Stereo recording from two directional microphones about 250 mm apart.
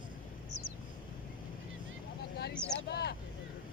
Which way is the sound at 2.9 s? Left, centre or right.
Left.